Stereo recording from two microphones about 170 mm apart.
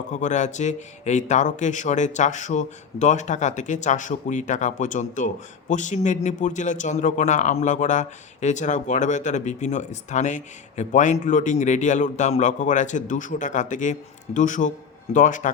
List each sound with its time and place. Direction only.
0.1 s speech: 45° left (ahead or behind)